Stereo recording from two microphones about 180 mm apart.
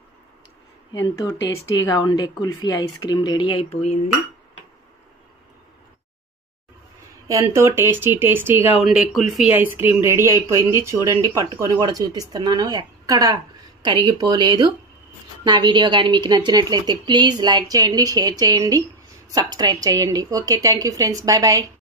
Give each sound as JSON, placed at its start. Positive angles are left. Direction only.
{"t": 1.0, "sound": "speech", "side_deg": 20}
{"t": 7.2, "sound": "speech", "side_deg": -15}